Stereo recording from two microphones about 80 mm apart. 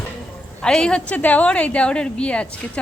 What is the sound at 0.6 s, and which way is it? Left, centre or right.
A woman's voice, centre.